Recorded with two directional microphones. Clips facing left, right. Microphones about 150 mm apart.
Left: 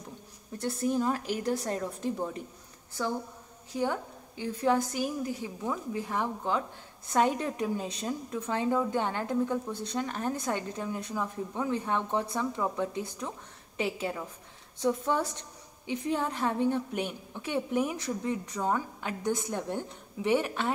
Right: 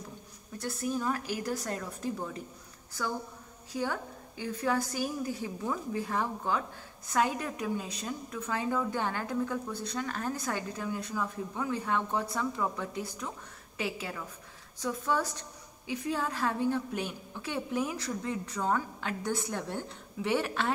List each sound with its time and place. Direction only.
0.6 s a woman's voice: 25° left (ahead or behind)